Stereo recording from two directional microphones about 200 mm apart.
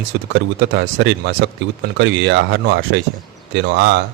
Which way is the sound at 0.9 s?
55° right (ahead or behind).